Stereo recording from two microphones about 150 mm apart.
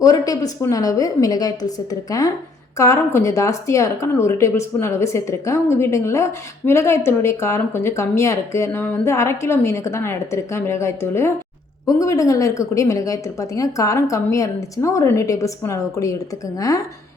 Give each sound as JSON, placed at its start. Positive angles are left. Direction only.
{"t": 0.0, "sound": "speech", "side_deg": 25}